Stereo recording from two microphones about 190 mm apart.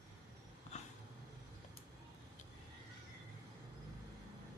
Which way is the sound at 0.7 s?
35° left (ahead or behind).